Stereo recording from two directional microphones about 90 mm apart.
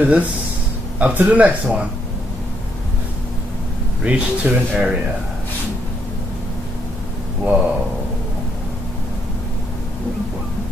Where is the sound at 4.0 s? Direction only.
10° right (ahead or behind).